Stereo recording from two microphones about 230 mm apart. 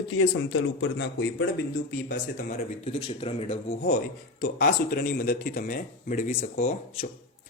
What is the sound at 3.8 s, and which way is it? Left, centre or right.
Speech, left.